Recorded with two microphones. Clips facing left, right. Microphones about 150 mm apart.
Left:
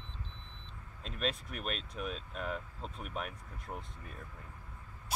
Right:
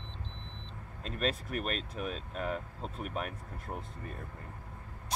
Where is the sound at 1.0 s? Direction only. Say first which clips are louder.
Right 3 dB; centre (ahead or behind).